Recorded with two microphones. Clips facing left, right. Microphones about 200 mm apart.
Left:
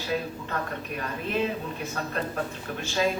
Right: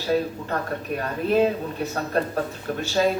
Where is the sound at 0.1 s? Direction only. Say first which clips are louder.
Right 7 dB; 40° right (ahead or behind).